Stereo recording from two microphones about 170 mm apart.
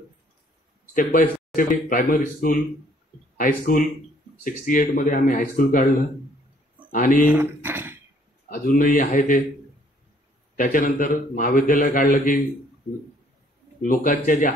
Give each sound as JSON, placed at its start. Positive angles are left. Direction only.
{"t": 0.9, "sound": "a man's voice", "side_deg": 55}
{"t": 6.9, "sound": "speech", "side_deg": 50}
{"t": 7.3, "sound": "speech", "side_deg": -15}
{"t": 8.6, "sound": "a man's voice", "side_deg": 50}
{"t": 10.6, "sound": "a man's voice", "side_deg": 55}
{"t": 13.8, "sound": "a man's voice", "side_deg": 50}